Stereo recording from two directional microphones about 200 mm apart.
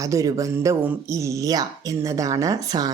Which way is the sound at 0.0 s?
15° right (ahead or behind).